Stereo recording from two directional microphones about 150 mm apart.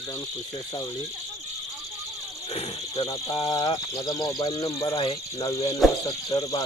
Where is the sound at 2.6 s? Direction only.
35° left (ahead or behind).